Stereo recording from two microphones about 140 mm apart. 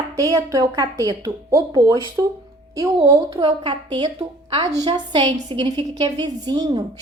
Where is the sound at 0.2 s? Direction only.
25° right (ahead or behind).